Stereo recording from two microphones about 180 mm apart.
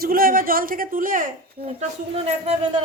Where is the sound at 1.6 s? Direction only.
35° right (ahead or behind).